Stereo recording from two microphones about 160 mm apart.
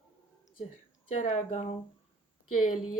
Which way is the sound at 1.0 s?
45° left (ahead or behind).